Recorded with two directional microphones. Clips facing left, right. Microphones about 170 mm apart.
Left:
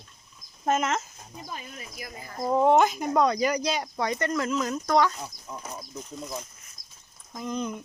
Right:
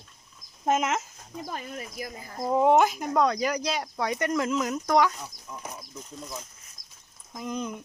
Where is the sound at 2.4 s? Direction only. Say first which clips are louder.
Even; 10° right (ahead or behind).